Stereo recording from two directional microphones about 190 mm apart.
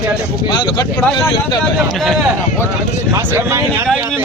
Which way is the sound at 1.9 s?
Centre (ahead or behind).